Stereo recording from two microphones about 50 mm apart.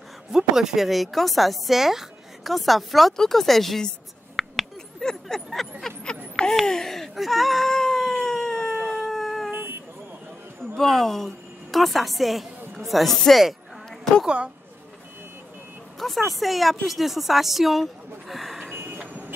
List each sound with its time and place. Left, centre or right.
0.3 s speech: centre
4.4 s a sound: centre
5.0 s a sound: centre
6.6 s whimper: centre
9.5 s vehicle: right
10.8 s a woman's voice: centre
14.2 s a woman's voice: right
16.0 s speech: centre
18.3 s a sound: centre
18.7 s vehicle: right